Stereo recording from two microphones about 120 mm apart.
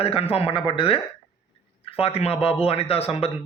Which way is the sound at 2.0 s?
55° left (ahead or behind).